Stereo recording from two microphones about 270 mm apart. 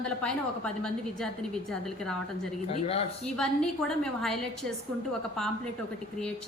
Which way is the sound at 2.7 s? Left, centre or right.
Left.